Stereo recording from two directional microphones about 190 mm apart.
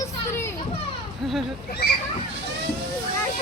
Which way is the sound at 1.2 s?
Centre (ahead or behind).